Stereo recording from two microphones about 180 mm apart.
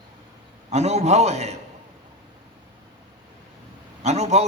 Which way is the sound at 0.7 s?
40° right (ahead or behind).